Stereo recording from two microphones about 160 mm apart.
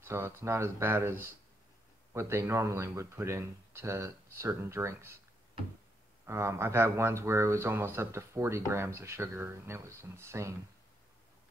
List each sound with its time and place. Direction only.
0.0 s speech: 15° right (ahead or behind)
2.1 s speech: 15° right (ahead or behind)
6.2 s speech: 15° right (ahead or behind)